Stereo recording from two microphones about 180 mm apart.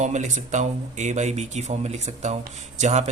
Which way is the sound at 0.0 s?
40° right (ahead or behind).